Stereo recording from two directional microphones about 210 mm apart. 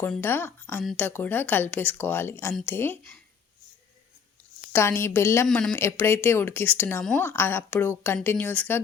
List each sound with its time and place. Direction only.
0.0 s speech: 10° left (ahead or behind)
4.7 s speech: 10° left (ahead or behind)